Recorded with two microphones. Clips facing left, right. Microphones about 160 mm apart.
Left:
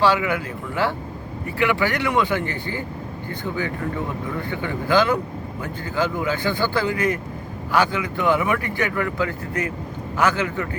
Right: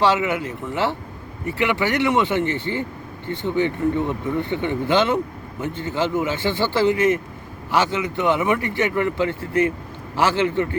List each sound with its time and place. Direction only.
0.0 s a man's voice: 20° right (ahead or behind)